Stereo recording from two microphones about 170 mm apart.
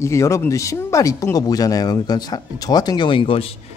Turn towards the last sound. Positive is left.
turn(degrees=30)  # may be behind; listen again after turning